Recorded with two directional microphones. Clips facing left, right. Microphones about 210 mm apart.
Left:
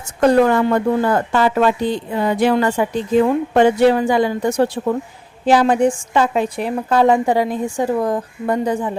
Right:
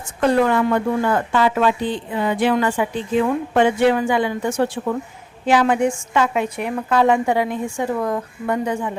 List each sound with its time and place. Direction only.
0.2 s a woman's voice: 40° left (ahead or behind)